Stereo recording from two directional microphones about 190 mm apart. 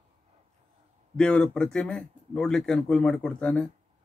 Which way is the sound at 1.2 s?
5° left (ahead or behind).